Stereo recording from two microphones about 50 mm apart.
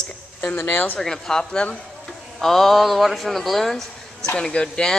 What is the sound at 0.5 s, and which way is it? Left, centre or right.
Speech, left.